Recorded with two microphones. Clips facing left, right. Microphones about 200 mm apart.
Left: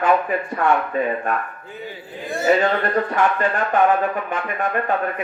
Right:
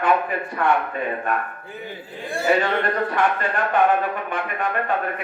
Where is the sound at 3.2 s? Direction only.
45° left (ahead or behind).